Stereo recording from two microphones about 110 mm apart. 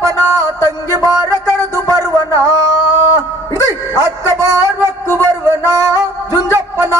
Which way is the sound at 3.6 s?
30° right (ahead or behind).